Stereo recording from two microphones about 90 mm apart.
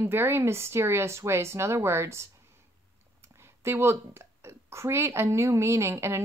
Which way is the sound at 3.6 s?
30° right (ahead or behind).